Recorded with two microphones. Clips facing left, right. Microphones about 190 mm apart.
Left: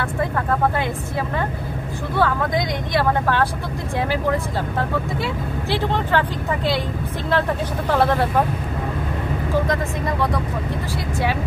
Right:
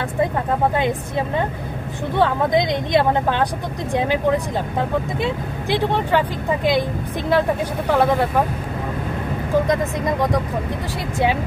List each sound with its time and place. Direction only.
2.1 s speech: 25° right (ahead or behind)
7.9 s speech: 15° right (ahead or behind)